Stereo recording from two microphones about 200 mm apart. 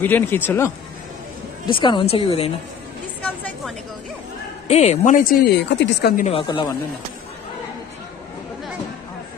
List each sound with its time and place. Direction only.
0.0 s speech: 10° left (ahead or behind)
1.7 s a woman's voice: 25° left (ahead or behind)
3.2 s speech: 5° left (ahead or behind)
4.6 s speech: 30° left (ahead or behind)
5.7 s speech: 60° left (ahead or behind)
6.1 s a woman's voice: 30° left (ahead or behind)